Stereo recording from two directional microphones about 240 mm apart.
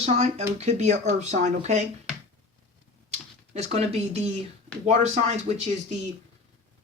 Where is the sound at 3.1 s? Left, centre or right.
Right.